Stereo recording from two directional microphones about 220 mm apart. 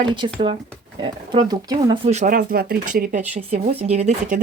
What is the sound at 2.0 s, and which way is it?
Speech, 35° right (ahead or behind).